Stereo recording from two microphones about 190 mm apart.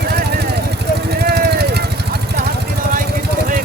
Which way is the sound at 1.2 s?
60° right (ahead or behind).